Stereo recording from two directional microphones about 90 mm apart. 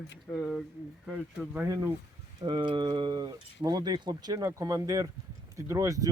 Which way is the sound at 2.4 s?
70° right (ahead or behind).